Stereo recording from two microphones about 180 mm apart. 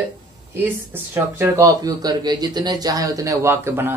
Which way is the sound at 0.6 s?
10° right (ahead or behind).